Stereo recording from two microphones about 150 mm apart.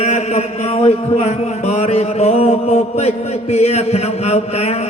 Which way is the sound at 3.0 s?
45° left (ahead or behind).